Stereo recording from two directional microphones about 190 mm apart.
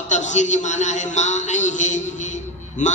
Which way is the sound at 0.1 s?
40° left (ahead or behind).